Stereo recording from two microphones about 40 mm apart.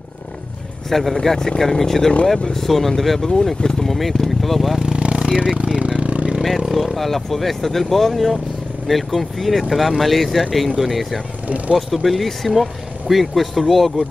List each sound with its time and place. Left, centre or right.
0.8 s speech: centre
4.9 s a sound: right
6.7 s speech: centre
11.4 s speech: right
11.7 s speech: centre